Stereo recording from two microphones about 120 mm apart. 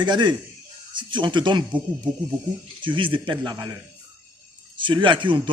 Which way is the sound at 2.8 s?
45° right (ahead or behind).